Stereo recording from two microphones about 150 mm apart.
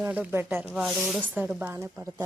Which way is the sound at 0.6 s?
Centre (ahead or behind).